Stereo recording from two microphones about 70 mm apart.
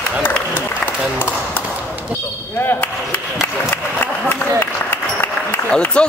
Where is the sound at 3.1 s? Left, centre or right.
Left.